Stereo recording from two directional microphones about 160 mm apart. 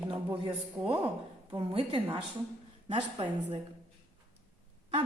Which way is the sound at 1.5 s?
30° right (ahead or behind).